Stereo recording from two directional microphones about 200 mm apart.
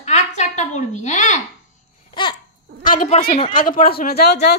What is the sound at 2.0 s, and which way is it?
Babbling, 25° left (ahead or behind).